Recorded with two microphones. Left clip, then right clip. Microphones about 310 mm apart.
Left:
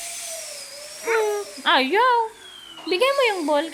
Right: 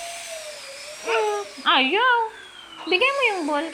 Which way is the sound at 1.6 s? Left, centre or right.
Left.